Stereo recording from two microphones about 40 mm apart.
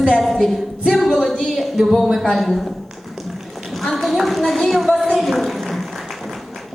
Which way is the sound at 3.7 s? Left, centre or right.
Centre.